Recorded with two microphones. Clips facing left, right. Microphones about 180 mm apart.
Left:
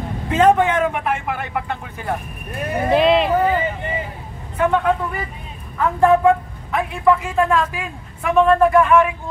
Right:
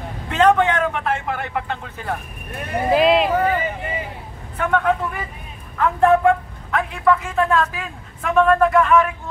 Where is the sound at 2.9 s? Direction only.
Centre (ahead or behind).